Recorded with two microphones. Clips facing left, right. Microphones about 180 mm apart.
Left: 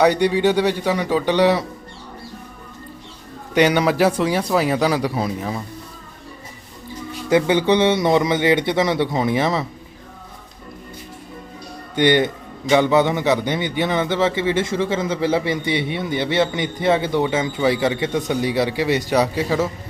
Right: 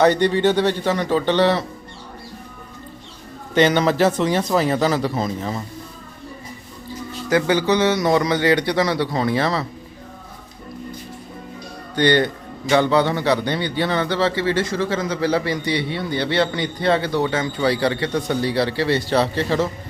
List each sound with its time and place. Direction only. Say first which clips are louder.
0.0 s a man's voice: even; 10° left (ahead or behind)
3.5 s a man's voice: even; 10° left (ahead or behind)
7.3 s a man's voice: left 2 dB; 20° left (ahead or behind)
11.9 s a man's voice: left 1 dB; 20° left (ahead or behind)